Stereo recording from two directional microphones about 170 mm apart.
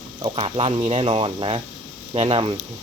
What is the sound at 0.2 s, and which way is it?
Speech, 30° right (ahead or behind).